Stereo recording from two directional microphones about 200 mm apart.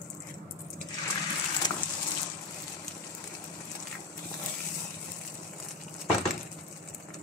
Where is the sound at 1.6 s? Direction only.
65° left (ahead or behind).